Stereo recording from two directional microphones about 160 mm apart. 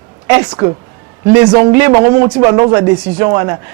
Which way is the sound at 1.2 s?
10° right (ahead or behind).